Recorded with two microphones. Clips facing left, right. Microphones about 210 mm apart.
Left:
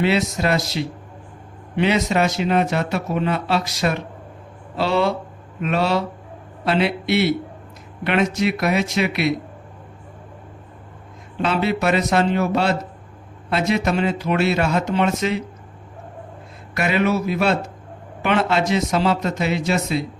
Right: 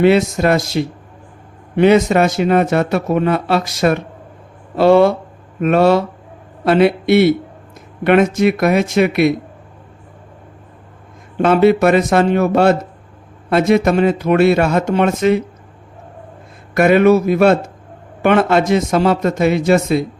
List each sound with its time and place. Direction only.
0.0 s a man's voice: 50° right (ahead or behind)
11.3 s a man's voice: 50° right (ahead or behind)
16.7 s a man's voice: 50° right (ahead or behind)